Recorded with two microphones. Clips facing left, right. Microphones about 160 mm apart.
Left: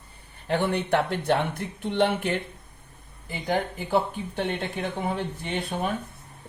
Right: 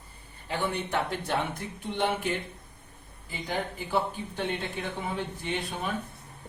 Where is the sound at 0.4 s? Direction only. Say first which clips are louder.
Left 6 dB; 65° left (ahead or behind).